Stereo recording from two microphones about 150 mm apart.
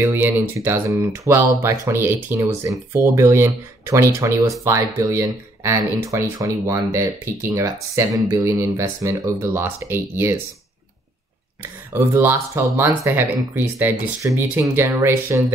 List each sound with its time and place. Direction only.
0.0 s speech: 15° right (ahead or behind)
11.9 s speech: 15° right (ahead or behind)